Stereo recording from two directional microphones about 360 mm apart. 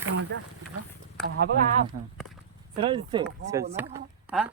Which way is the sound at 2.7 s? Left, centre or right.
Centre.